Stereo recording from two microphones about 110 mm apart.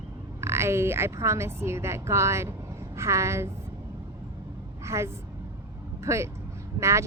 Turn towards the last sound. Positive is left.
turn(degrees=-25)  # may be behind; listen again after turning